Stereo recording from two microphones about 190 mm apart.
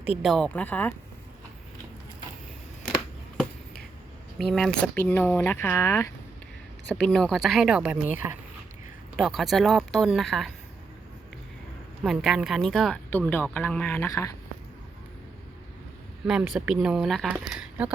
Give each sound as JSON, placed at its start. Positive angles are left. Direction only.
{"t": 0.0, "sound": "speech", "side_deg": -5}
{"t": 2.8, "sound": "scissors", "side_deg": -5}
{"t": 4.4, "sound": "speech", "side_deg": 0}
{"t": 7.0, "sound": "speech", "side_deg": 0}
{"t": 12.0, "sound": "speech", "side_deg": 0}
{"t": 16.2, "sound": "speech", "side_deg": 0}